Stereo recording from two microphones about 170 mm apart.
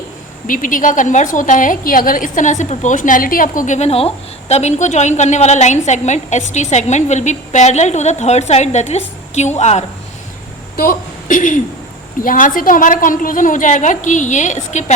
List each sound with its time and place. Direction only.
0.4 s a woman's voice: 50° left (ahead or behind)
10.8 s a woman's voice: 55° left (ahead or behind)